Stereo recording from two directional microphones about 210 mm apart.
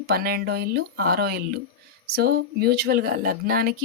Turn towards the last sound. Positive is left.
turn(degrees=-45)  # may be behind; listen again after turning